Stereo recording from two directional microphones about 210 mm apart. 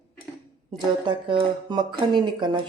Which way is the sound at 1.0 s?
25° right (ahead or behind).